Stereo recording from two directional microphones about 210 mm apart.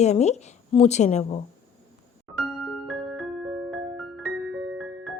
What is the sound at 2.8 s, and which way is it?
Music, centre (ahead or behind).